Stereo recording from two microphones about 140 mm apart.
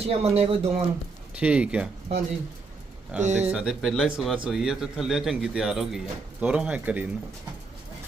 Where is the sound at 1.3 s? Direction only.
10° right (ahead or behind).